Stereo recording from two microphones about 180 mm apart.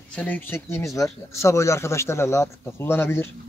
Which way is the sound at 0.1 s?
10° left (ahead or behind).